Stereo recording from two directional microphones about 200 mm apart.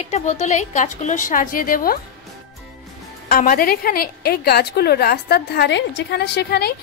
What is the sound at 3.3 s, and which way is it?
Speech, 45° left (ahead or behind).